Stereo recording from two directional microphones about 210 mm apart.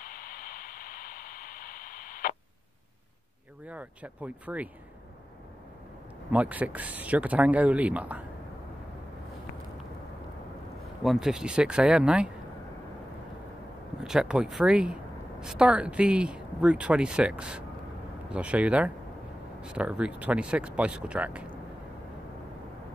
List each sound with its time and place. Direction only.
0.0 s white noise: 40° left (ahead or behind)
3.6 s speech: 5° right (ahead or behind)
6.3 s speech: 5° right (ahead or behind)
11.0 s speech: centre (ahead or behind)
14.0 s speech: 5° right (ahead or behind)